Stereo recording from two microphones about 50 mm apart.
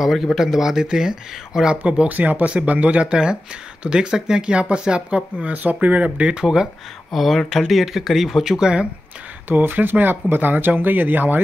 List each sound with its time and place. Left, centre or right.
0.0 s speech: centre
1.8 s speech: right
6.3 s speech: centre
7.1 s speech: centre
8.5 s speech: centre
9.5 s speech: right